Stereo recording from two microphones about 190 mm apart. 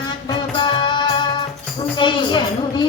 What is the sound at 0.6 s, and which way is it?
Music, 25° left (ahead or behind).